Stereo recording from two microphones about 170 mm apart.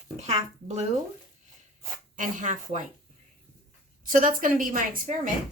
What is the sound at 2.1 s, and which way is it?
Speech, 50° right (ahead or behind).